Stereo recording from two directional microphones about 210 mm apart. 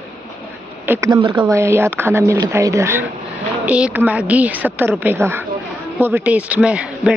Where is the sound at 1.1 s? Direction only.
20° right (ahead or behind).